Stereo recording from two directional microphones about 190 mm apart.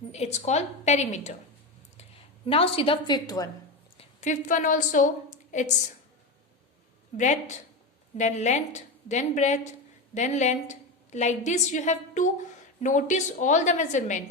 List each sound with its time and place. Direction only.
0.1 s a woman's voice: 35° left (ahead or behind)
2.5 s a woman's voice: 30° left (ahead or behind)
3.9 s a woman's voice: 40° left (ahead or behind)
7.2 s a woman's voice: 40° left (ahead or behind)